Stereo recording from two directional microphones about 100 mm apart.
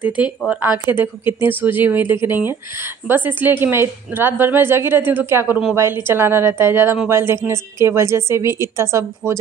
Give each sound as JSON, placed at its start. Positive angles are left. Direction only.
{"t": 0.5, "sound": "speech", "side_deg": -15}